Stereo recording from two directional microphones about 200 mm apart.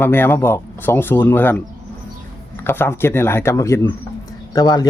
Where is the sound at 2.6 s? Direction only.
10° left (ahead or behind).